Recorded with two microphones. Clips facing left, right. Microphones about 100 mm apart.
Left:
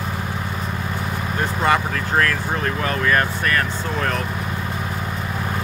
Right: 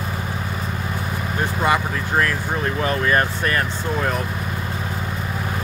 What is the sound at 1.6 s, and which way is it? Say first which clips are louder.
Speech: left 1 dB; 5° right (ahead or behind).